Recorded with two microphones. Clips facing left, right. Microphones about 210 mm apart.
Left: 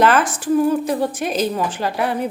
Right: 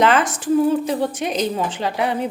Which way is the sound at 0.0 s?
20° right (ahead or behind).